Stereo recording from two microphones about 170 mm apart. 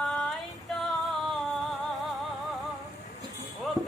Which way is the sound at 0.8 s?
Centre (ahead or behind).